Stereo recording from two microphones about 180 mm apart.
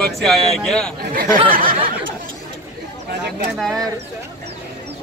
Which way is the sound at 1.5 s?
50° right (ahead or behind).